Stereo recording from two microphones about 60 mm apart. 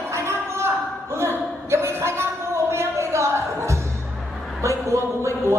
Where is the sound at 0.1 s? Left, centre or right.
Right.